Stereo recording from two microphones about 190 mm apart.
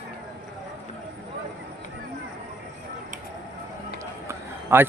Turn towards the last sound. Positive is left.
turn(degrees=-15)  # may be behind; listen again after turning